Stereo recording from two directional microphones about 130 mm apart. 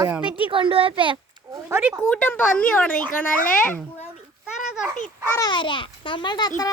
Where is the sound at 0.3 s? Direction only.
40° right (ahead or behind).